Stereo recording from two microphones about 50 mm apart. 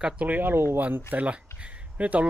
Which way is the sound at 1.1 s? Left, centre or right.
Right.